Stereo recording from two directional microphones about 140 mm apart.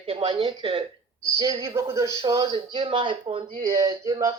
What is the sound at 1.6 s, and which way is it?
Speech, 20° right (ahead or behind).